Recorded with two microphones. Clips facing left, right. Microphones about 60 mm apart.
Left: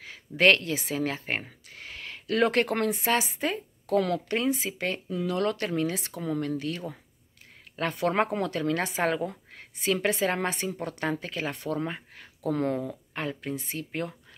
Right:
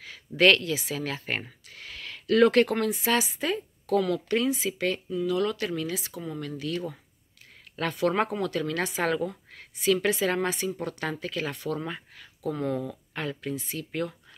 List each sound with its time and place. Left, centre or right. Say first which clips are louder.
0.0 s speech: right 1 dB; left
1.7 s a sound: even; left
2.7 s speech: even; left
5.1 s speech: left 1 dB; left
6.6 s a woman's voice: right 2 dB; left